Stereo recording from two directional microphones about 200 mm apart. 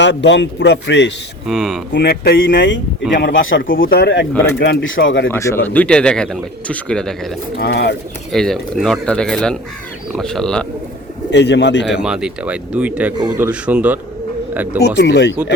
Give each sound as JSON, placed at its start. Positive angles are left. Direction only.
{"t": 0.0, "sound": "a man's voice", "side_deg": 60}
{"t": 1.5, "sound": "a man's voice", "side_deg": 0}
{"t": 1.9, "sound": "a man's voice", "side_deg": 50}
{"t": 3.6, "sound": "speech", "side_deg": 45}
{"t": 4.6, "sound": "speech", "side_deg": 70}
{"t": 5.3, "sound": "a man's voice", "side_deg": 10}
{"t": 7.6, "sound": "a man's voice", "side_deg": 55}
{"t": 8.3, "sound": "a man's voice", "side_deg": 0}
{"t": 11.3, "sound": "a man's voice", "side_deg": 60}
{"t": 12.0, "sound": "a man's voice", "side_deg": -5}
{"t": 14.9, "sound": "a man's voice", "side_deg": 60}